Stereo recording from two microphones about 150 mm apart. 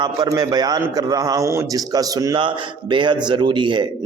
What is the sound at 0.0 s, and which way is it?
A man's voice, 25° right (ahead or behind).